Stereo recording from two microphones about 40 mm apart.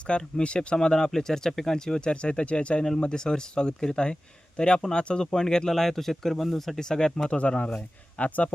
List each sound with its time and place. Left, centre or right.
0.1 s speech: left; by 6.7 s centre
6.7 s speech: centre
7.3 s speech: left